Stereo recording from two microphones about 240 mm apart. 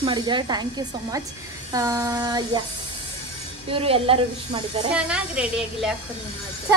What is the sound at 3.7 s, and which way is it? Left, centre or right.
Speech, right.